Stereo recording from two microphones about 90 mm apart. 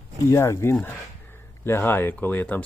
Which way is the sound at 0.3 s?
30° left (ahead or behind).